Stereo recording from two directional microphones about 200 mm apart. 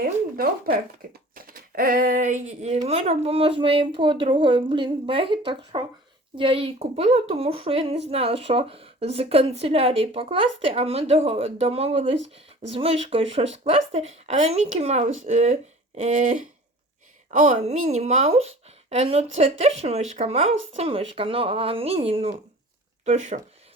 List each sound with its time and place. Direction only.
0.3 s a woman's voice: 50° right (ahead or behind); by 12.1 s 30° right (ahead or behind)
12.1 s speech: 65° right (ahead or behind)
12.7 s a woman's voice: 30° right (ahead or behind)